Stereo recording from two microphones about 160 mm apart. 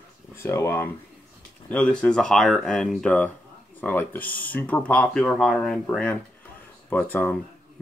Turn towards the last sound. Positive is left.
turn(degrees=10)  # may be behind; listen again after turning